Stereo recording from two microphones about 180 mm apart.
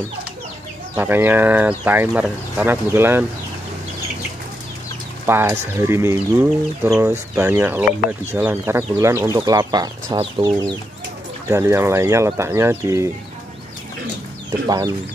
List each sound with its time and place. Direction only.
0.9 s speech: 10° right (ahead or behind)
5.2 s speech: 10° right (ahead or behind); by 10.6 s 30° right (ahead or behind)
11.4 s speech: 15° right (ahead or behind)
14.7 s speech: 20° right (ahead or behind)